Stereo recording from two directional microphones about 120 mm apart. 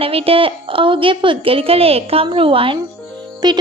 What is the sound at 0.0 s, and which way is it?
A woman's voice, 55° right (ahead or behind).